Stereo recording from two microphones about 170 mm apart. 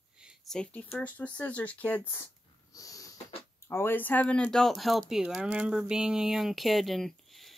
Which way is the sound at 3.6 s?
15° left (ahead or behind).